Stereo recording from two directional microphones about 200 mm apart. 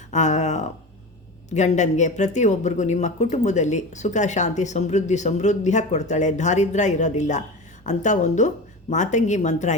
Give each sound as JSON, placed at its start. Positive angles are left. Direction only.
{"t": 0.1, "sound": "speech", "side_deg": 35}